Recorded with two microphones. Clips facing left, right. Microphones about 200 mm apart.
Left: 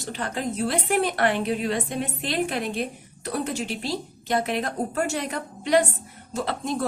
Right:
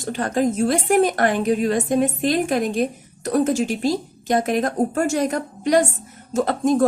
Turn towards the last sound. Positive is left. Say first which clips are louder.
# right 9 dB
turn(degrees=-45)  # may be behind; listen again after turning